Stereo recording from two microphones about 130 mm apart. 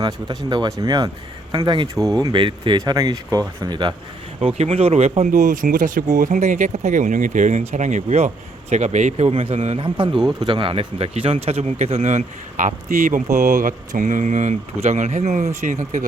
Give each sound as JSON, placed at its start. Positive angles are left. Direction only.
{"t": 0.0, "sound": "speech", "side_deg": -35}
{"t": 4.4, "sound": "speech", "side_deg": -55}
{"t": 6.1, "sound": "a man's voice", "side_deg": -75}